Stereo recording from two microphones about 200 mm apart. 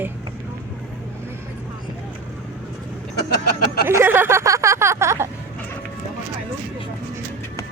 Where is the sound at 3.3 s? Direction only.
50° left (ahead or behind).